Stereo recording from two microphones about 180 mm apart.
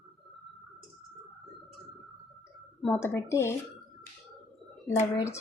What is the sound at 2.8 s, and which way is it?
Speech, 10° left (ahead or behind).